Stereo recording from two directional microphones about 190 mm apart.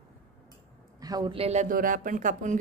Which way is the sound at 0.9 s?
20° right (ahead or behind).